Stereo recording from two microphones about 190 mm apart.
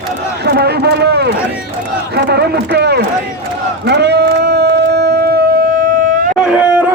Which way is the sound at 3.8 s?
60° right (ahead or behind).